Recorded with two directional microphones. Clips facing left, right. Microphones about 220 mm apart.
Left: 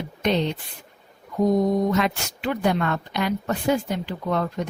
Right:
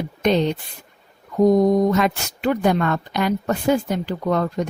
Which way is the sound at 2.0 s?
45° right (ahead or behind).